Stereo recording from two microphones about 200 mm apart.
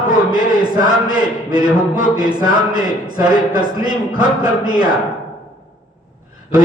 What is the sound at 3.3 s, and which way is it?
Speech, 20° right (ahead or behind).